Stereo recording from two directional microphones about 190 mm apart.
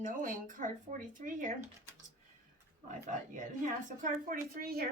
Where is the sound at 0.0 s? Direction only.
45° right (ahead or behind).